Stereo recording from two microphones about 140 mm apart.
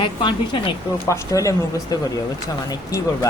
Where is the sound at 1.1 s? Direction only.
25° left (ahead or behind).